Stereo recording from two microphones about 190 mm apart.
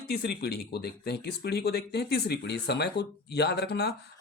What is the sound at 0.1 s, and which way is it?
Speech, 60° left (ahead or behind).